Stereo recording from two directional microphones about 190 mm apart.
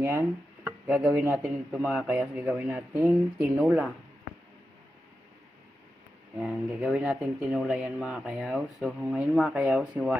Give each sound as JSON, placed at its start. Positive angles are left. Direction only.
{"t": 0.0, "sound": "speech", "side_deg": -15}
{"t": 6.4, "sound": "speech", "side_deg": -5}